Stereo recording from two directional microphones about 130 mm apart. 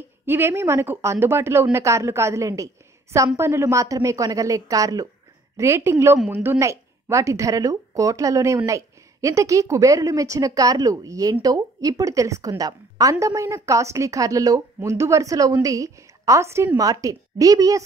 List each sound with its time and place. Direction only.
0.3 s speech: 20° right (ahead or behind)